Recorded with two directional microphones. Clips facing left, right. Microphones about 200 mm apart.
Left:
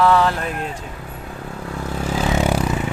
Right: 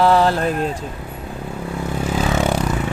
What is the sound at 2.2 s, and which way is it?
Vehicle, 10° left (ahead or behind).